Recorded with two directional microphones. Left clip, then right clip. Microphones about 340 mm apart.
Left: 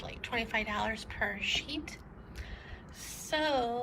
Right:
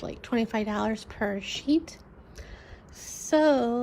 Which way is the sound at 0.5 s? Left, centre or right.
Right.